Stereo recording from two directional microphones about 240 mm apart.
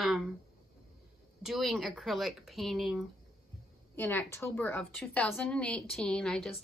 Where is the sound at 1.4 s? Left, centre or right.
Centre.